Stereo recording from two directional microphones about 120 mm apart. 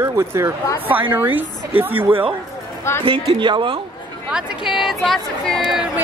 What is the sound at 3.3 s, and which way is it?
Speech, 45° right (ahead or behind).